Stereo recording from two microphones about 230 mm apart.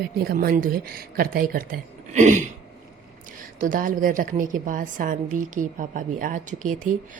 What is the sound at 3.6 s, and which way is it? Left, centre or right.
A woman's voice, right.